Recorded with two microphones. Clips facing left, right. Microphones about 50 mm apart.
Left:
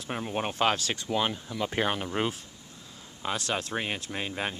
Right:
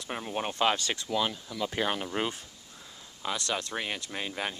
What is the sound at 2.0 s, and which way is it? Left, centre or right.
Speech, centre.